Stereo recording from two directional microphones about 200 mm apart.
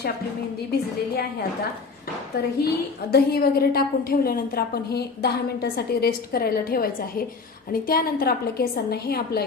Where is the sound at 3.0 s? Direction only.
50° left (ahead or behind).